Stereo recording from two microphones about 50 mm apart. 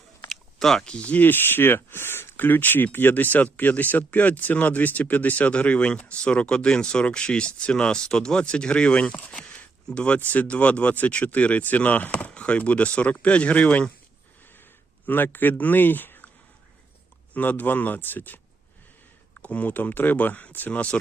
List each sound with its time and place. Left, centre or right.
0.3 s a sound: centre
1.1 s speech: left
2.3 s speech: left
9.3 s a sound: left
9.9 s speech: left
10.2 s speech: left
14.5 s a sound: left
17.3 s speech: left
19.4 s speech: left